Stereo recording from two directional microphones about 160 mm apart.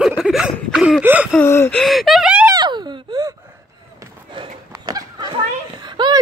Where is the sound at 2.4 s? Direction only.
25° right (ahead or behind).